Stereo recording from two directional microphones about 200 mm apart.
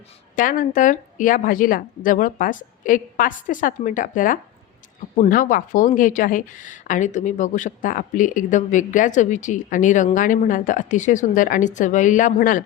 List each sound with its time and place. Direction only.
0.3 s speech: 40° left (ahead or behind)